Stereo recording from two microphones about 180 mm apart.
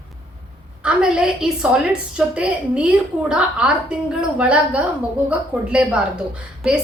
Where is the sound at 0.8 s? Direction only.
5° right (ahead or behind).